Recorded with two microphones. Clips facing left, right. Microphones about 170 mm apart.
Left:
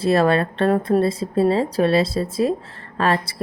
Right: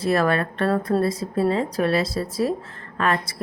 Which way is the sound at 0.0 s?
30° left (ahead or behind).